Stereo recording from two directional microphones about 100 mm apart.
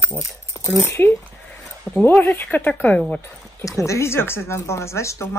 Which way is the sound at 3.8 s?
30° left (ahead or behind).